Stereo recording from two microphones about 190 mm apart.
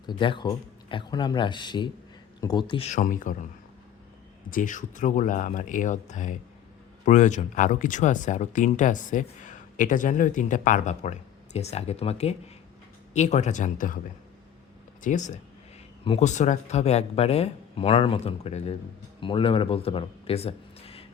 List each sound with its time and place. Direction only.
0.0 s speech: 25° left (ahead or behind)
3.0 s speech: 45° left (ahead or behind)
4.4 s speech: 45° left (ahead or behind)
15.0 s speech: 40° left (ahead or behind)